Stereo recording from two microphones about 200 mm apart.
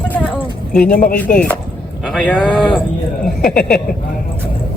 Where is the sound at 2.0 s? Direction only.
5° right (ahead or behind).